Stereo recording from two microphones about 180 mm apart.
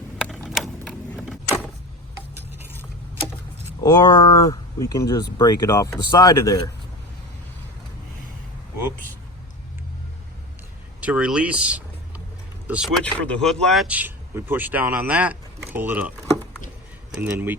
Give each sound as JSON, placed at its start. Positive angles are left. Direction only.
{"t": 0.2, "sound": "a sound", "side_deg": 0}
{"t": 3.8, "sound": "speech", "side_deg": 25}
{"t": 11.0, "sound": "speech", "side_deg": -10}
{"t": 13.0, "sound": "speech", "side_deg": 5}